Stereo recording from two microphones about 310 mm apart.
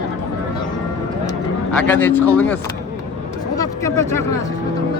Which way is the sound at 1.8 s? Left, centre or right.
Centre.